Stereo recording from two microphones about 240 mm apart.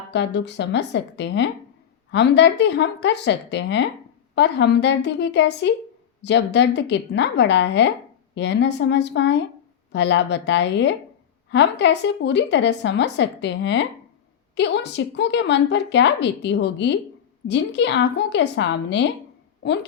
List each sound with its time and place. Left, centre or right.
0.1 s a woman's voice: left